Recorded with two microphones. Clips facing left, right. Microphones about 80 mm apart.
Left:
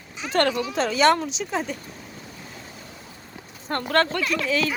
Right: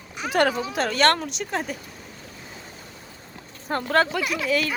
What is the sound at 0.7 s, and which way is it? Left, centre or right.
Speech, centre.